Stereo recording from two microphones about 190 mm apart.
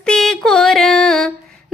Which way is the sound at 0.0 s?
Centre (ahead or behind).